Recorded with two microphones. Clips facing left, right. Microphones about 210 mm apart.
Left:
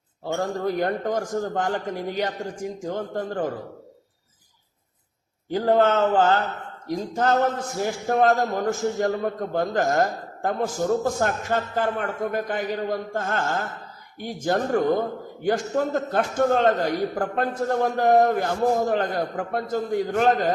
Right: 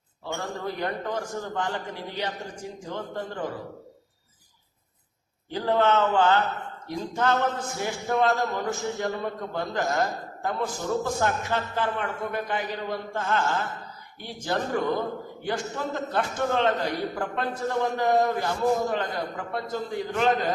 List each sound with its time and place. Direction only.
0.3 s a man's voice: 45° left (ahead or behind)
5.5 s a man's voice: 45° left (ahead or behind)